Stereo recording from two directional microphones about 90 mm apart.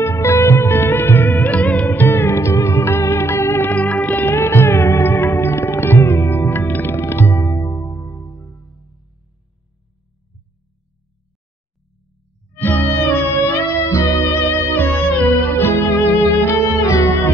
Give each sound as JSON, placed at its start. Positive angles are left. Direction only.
{"t": 0.0, "sound": "music", "side_deg": 30}
{"t": 12.5, "sound": "music", "side_deg": 20}